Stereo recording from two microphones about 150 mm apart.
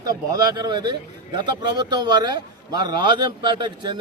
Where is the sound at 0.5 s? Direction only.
30° right (ahead or behind).